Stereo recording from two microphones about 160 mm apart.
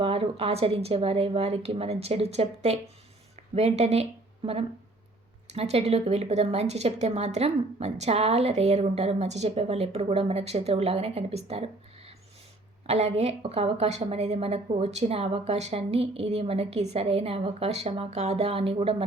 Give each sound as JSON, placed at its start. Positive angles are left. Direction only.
{"t": 0.0, "sound": "a woman's voice", "side_deg": -35}
{"t": 5.5, "sound": "a woman's voice", "side_deg": -40}